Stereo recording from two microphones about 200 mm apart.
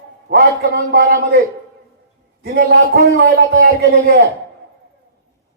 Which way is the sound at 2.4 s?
55° right (ahead or behind).